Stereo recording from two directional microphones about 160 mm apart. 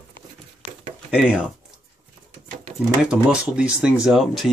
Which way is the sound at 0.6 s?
5° right (ahead or behind).